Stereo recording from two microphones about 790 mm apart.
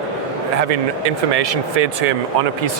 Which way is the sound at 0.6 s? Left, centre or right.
Right.